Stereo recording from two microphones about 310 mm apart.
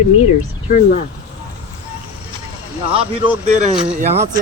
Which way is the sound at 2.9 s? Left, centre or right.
Centre.